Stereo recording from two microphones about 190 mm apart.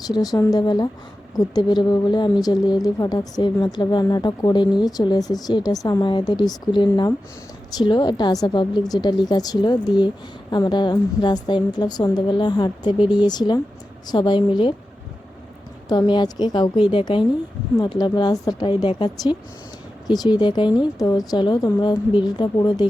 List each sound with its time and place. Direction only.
0.1 s a woman's voice: 20° left (ahead or behind)
15.9 s a woman's voice: 20° left (ahead or behind)